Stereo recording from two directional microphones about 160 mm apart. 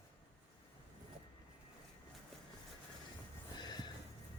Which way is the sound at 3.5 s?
25° left (ahead or behind).